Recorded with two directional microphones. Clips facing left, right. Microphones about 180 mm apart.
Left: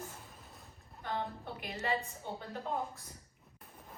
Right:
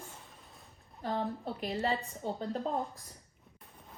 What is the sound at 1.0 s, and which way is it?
Speech, 35° right (ahead or behind).